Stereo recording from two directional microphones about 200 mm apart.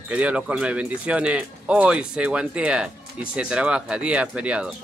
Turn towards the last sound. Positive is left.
turn(degrees=-5)  # may be behind; listen again after turning